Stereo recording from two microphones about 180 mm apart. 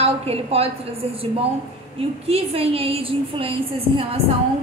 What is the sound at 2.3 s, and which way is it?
A woman's voice, 30° right (ahead or behind).